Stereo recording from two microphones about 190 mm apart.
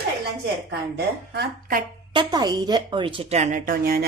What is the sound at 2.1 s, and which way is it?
A woman's voice, 25° right (ahead or behind).